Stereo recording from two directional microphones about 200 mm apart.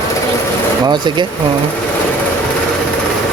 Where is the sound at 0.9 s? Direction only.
25° right (ahead or behind).